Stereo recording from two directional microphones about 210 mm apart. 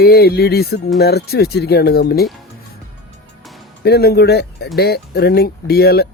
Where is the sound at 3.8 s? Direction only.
50° left (ahead or behind).